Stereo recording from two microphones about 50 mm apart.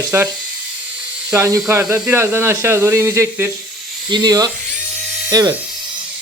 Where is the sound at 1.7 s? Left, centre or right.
Right.